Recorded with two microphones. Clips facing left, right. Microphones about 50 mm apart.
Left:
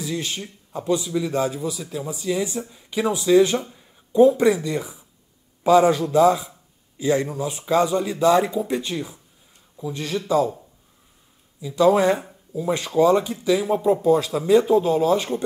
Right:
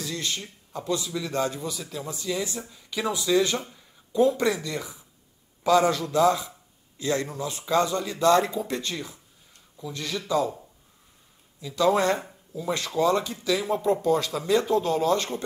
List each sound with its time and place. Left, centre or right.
0.0 s a man's voice: centre
11.6 s speech: centre